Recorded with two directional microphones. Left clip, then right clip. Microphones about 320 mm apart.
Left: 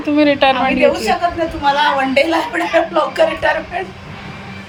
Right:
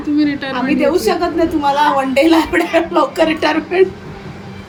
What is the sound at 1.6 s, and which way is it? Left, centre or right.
Speech, right.